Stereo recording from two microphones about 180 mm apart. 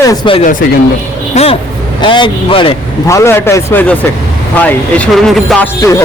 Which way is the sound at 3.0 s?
15° left (ahead or behind).